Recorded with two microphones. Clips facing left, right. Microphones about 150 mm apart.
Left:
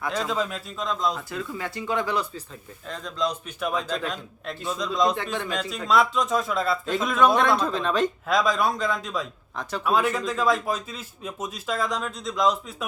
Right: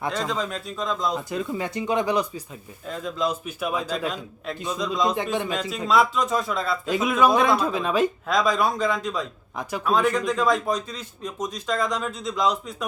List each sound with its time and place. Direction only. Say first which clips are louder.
0.1 s speech: left 4 dB; 5° left (ahead or behind)
1.1 s speech: right 5 dB; 20° right (ahead or behind)
2.8 s a man's voice: right 2 dB; 5° right (ahead or behind)
5.1 s a man's voice: right 4 dB; 15° right (ahead or behind)
5.5 s speech: right 1 dB; 5° right (ahead or behind)